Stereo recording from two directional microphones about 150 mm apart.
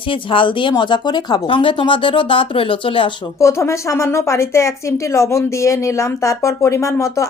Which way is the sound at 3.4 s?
20° left (ahead or behind).